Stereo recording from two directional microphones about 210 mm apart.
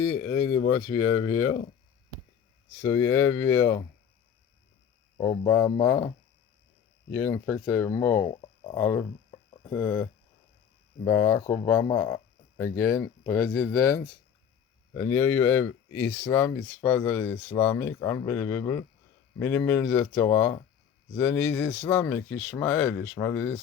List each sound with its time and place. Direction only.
0.7 s speech: 15° left (ahead or behind)
2.8 s speech: 15° left (ahead or behind)
5.1 s speech: 25° left (ahead or behind)
5.5 s speech: 10° left (ahead or behind)
7.1 s speech: 15° left (ahead or behind)
8.3 s a sound: 25° left (ahead or behind)
8.7 s speech: 10° left (ahead or behind)
9.3 s a sound: 25° left (ahead or behind)
9.7 s speech: 10° left (ahead or behind)
15.1 s speech: 10° left (ahead or behind)